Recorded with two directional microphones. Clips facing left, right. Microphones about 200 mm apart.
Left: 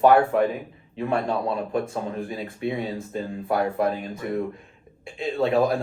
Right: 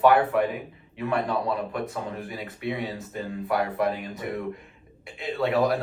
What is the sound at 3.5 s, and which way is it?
Speech, 25° left (ahead or behind).